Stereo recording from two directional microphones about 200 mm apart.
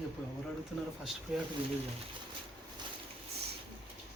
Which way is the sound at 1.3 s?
5° right (ahead or behind).